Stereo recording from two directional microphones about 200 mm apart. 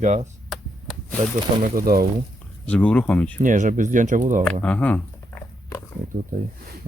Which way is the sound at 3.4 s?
40° right (ahead or behind).